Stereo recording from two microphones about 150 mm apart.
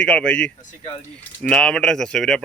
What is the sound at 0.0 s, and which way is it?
Speech, 5° left (ahead or behind).